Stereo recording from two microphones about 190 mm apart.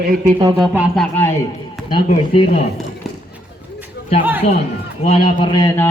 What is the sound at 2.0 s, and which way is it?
Speech, 30° left (ahead or behind).